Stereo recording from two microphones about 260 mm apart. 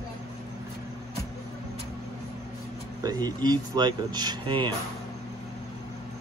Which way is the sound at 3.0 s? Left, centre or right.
Centre.